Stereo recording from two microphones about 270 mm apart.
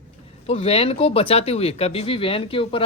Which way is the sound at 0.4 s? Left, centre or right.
Left.